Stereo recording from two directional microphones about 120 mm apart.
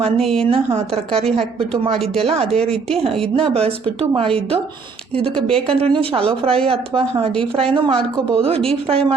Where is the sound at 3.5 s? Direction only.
50° right (ahead or behind).